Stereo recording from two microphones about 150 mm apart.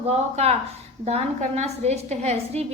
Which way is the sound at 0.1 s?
45° right (ahead or behind).